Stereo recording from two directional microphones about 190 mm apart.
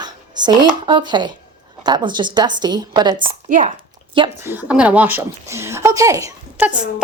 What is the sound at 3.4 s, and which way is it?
Speech, 40° right (ahead or behind).